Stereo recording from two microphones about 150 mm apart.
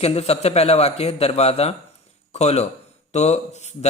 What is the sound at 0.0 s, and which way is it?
A man's voice, 45° left (ahead or behind).